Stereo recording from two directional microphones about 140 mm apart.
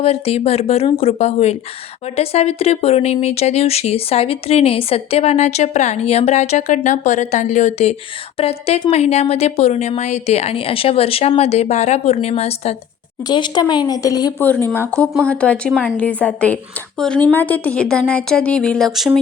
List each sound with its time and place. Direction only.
0.0 s speech: 45° left (ahead or behind)
13.2 s speech: 30° left (ahead or behind)
14.3 s speech: 15° left (ahead or behind); by 19.2 s centre (ahead or behind)